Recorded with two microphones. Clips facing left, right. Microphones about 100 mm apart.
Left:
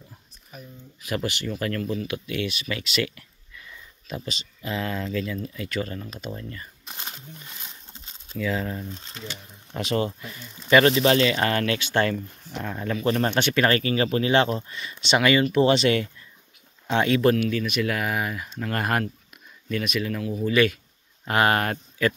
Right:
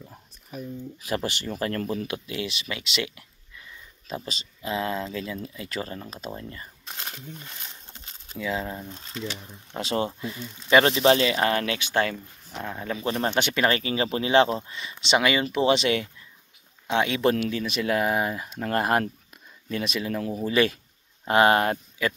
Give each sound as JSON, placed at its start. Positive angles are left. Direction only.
{"t": 1.0, "sound": "speech", "side_deg": -35}
{"t": 2.0, "sound": "speech", "side_deg": -25}
{"t": 4.1, "sound": "speech", "side_deg": -35}
{"t": 4.6, "sound": "speech", "side_deg": -20}
{"t": 8.4, "sound": "speech", "side_deg": -20}
{"t": 17.2, "sound": "speech", "side_deg": -25}